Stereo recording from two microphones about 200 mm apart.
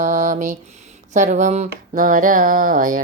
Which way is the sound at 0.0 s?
40° right (ahead or behind).